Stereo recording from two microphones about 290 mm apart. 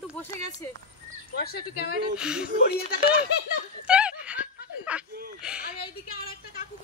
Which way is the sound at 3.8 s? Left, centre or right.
Centre.